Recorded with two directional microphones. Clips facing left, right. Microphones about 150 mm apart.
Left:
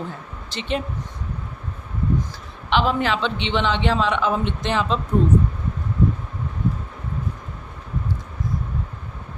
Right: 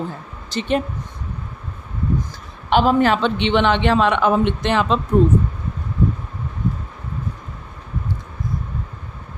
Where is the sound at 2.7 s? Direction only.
45° right (ahead or behind); by 5.0 s 65° right (ahead or behind).